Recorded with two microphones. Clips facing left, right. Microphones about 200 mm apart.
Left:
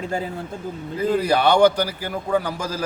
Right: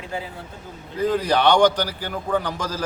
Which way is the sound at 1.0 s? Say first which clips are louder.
Even; 10° left (ahead or behind).